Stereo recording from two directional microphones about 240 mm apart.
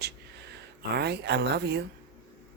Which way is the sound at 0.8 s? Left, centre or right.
Right.